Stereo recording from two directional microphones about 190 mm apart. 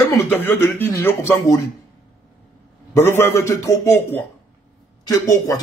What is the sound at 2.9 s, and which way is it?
A man's voice, 10° left (ahead or behind).